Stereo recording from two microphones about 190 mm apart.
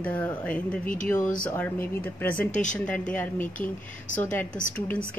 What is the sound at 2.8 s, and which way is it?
Speech, 5° left (ahead or behind).